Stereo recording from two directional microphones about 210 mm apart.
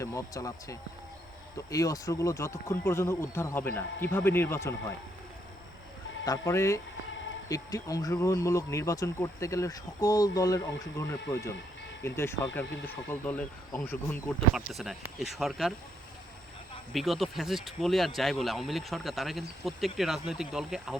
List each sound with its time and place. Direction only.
0.0 s speech: 15° left (ahead or behind)
6.2 s speech: 15° left (ahead or behind); by 15.7 s centre (ahead or behind)
16.9 s speech: centre (ahead or behind)